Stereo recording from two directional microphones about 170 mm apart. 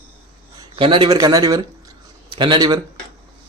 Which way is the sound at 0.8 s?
30° right (ahead or behind).